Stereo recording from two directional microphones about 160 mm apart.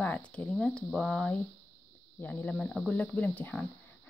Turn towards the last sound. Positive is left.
turn(degrees=10)  # may be behind; listen again after turning